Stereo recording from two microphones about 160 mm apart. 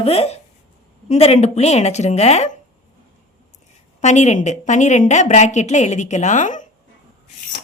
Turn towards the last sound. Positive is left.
turn(degrees=50)  # may be behind; listen again after turning